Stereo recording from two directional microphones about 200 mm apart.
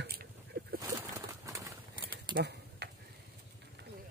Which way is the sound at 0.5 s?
50° right (ahead or behind).